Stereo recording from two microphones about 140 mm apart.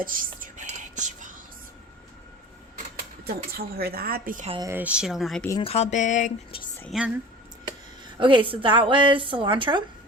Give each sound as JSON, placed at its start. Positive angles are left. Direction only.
{"t": 0.0, "sound": "speech", "side_deg": -85}
{"t": 0.7, "sound": "whispering", "side_deg": -60}
{"t": 3.2, "sound": "a woman's voice", "side_deg": -90}
{"t": 4.6, "sound": "speech", "side_deg": -15}
{"t": 5.6, "sound": "speech", "side_deg": 50}
{"t": 6.9, "sound": "speech", "side_deg": 0}
{"t": 8.2, "sound": "a woman's voice", "side_deg": -35}